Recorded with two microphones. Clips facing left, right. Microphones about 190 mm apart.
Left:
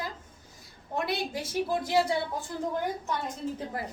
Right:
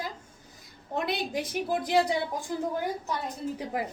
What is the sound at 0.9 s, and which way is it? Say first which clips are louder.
A woman's voice: right 1 dB; 20° right (ahead or behind).